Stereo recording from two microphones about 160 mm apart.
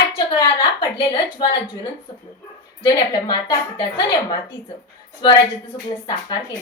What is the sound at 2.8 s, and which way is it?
A woman's voice, 30° left (ahead or behind).